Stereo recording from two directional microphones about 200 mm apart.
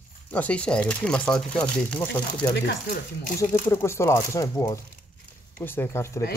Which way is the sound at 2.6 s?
55° left (ahead or behind).